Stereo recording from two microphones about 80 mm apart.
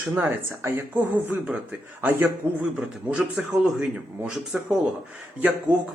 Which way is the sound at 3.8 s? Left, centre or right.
Centre.